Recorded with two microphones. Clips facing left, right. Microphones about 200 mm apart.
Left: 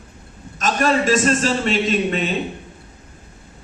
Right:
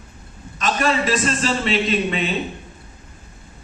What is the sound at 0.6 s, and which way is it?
A man's voice, 45° left (ahead or behind).